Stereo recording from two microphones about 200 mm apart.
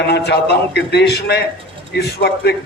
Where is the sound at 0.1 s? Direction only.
55° left (ahead or behind).